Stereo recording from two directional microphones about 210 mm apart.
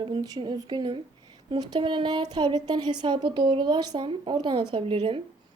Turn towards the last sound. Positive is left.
turn(degrees=-25)  # may be behind; listen again after turning